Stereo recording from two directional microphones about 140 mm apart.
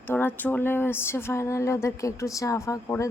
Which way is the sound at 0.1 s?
15° left (ahead or behind).